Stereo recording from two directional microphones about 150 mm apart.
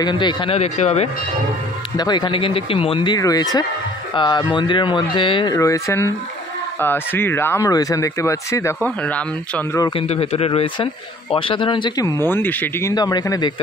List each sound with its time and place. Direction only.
0.0 s speech: 25° left (ahead or behind); by 1.0 s 45° left (ahead or behind)
2.0 s speech: 30° left (ahead or behind)
3.2 s speech: 25° left (ahead or behind)
8.8 s speech: 10° left (ahead or behind)
9.8 s speech: 30° left (ahead or behind)
10.0 s speech: 45° left (ahead or behind); by 12.9 s 15° left (ahead or behind)
12.9 s speech: 25° left (ahead or behind)